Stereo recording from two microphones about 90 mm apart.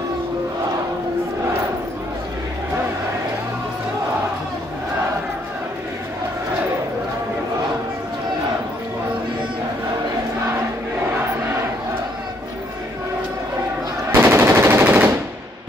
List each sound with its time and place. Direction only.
14.1 s machine gun: 30° right (ahead or behind)